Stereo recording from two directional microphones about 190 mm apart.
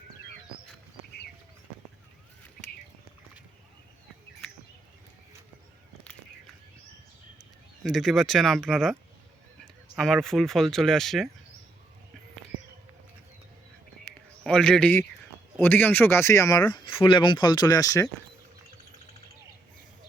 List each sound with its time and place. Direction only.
7.9 s speech: centre (ahead or behind)
14.4 s speech: 5° left (ahead or behind)